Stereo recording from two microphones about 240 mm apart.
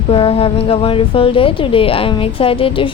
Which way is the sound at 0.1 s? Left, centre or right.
Left.